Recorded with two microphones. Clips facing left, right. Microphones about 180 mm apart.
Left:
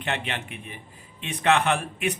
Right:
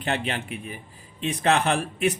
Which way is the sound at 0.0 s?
35° right (ahead or behind).